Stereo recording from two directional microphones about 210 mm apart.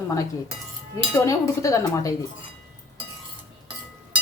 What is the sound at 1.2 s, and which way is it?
Speech, 15° left (ahead or behind).